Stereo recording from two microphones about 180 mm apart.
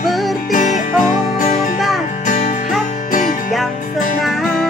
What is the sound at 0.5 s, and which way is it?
Music, 45° left (ahead or behind).